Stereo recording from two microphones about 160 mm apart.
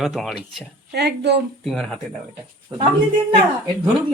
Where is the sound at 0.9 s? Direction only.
90° right.